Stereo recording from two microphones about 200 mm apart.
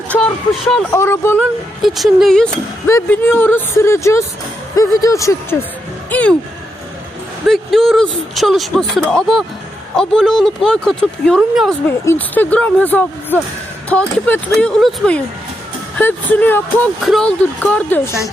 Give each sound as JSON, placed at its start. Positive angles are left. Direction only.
{"t": 0.1, "sound": "speech", "side_deg": 0}
{"t": 0.9, "sound": "speech", "side_deg": 15}
{"t": 1.8, "sound": "speech", "side_deg": 0}
{"t": 7.4, "sound": "speech", "side_deg": 0}
{"t": 11.9, "sound": "speech", "side_deg": 10}